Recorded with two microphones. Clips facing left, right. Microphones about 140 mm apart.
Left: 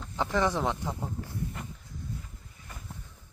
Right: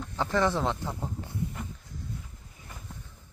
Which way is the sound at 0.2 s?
15° left (ahead or behind).